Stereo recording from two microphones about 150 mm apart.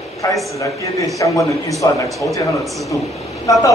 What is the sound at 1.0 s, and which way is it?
Speech, 20° left (ahead or behind).